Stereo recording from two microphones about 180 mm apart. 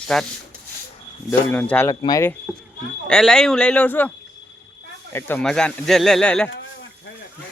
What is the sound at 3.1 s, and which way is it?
Speech, 5° left (ahead or behind).